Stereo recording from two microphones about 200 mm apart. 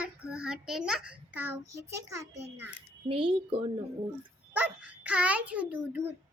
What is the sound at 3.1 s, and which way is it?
Speech, 25° right (ahead or behind).